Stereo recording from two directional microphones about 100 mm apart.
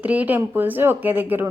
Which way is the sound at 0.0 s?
15° right (ahead or behind).